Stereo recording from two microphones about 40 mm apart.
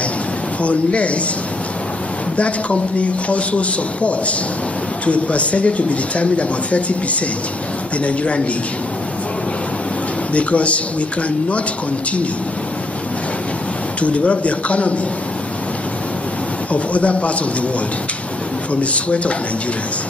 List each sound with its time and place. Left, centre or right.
0.6 s a man's voice: left
2.3 s a man's voice: left
8.0 s a man's voice: left
10.3 s a man's voice: left
14.0 s a man's voice: left
16.7 s a man's voice: left
18.8 s a man's voice: left